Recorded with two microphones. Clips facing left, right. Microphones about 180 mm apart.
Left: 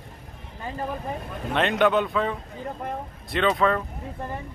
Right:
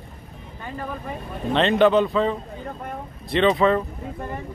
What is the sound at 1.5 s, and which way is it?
Speech, centre (ahead or behind).